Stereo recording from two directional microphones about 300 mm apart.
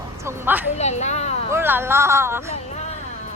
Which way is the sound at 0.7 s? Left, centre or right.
Left.